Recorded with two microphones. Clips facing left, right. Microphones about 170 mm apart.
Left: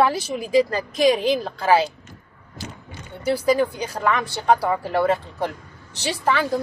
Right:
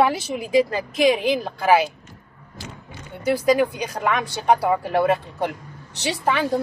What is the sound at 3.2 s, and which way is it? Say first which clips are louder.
A woman's voice: right 1 dB; 20° right (ahead or behind).